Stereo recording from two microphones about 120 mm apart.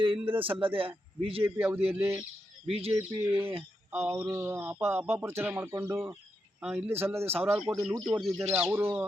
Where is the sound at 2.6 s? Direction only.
55° right (ahead or behind).